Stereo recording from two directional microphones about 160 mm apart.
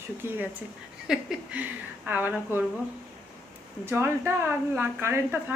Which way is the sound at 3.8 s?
15° right (ahead or behind).